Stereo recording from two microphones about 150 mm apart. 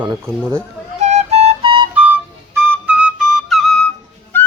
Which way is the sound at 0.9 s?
45° right (ahead or behind).